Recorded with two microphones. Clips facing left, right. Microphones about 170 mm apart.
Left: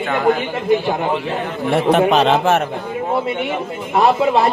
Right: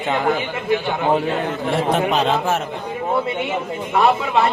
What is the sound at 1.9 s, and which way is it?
Speech, 70° left (ahead or behind).